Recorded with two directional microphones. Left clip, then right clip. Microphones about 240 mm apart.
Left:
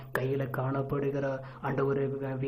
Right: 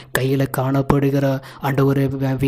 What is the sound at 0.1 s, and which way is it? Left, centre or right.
A man's voice, right.